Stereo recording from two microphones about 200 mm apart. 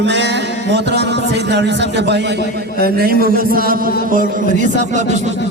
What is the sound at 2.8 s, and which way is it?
A man's voice, 50° right (ahead or behind).